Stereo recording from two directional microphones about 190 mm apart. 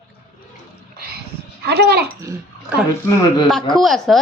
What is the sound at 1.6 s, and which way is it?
Speech, 60° right (ahead or behind).